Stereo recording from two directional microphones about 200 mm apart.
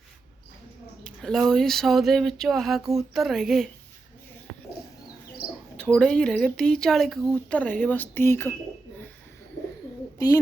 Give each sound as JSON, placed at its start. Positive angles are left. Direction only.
{"t": 1.0, "sound": "speech", "side_deg": 0}
{"t": 5.7, "sound": "speech", "side_deg": 5}
{"t": 10.2, "sound": "speech", "side_deg": 15}